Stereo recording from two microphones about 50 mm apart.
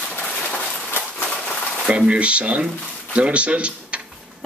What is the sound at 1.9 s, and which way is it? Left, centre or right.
Speech, right.